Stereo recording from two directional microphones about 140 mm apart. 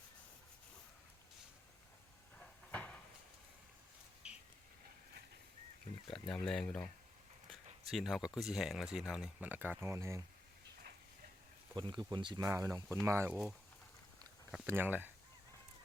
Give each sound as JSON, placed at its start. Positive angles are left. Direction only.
{"t": 2.4, "sound": "a sound", "side_deg": 10}
{"t": 6.1, "sound": "speech", "side_deg": 5}
{"t": 7.5, "sound": "a sound", "side_deg": 0}
{"t": 8.4, "sound": "speech", "side_deg": 0}
{"t": 11.7, "sound": "speech", "side_deg": -35}
{"t": 14.7, "sound": "speech", "side_deg": -15}